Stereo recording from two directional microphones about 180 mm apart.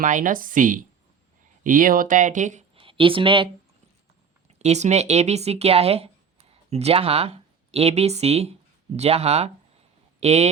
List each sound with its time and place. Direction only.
0.0 s speech: 50° right (ahead or behind)
2.7 s speech: 30° right (ahead or behind)